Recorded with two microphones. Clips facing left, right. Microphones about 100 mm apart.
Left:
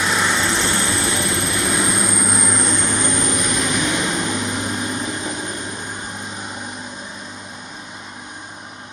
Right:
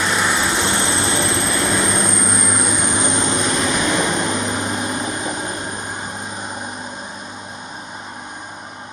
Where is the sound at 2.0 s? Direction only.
5° left (ahead or behind); by 8.4 s 40° right (ahead or behind).